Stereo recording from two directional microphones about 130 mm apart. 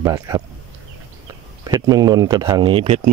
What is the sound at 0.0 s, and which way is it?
Speech, 25° right (ahead or behind).